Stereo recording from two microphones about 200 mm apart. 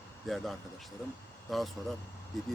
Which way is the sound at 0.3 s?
Centre (ahead or behind).